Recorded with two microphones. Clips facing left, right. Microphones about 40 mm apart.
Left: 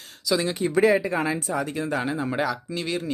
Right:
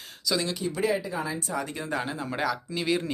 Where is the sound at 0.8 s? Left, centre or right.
Left.